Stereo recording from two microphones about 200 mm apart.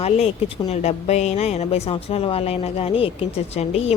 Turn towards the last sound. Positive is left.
turn(degrees=30)  # may be behind; listen again after turning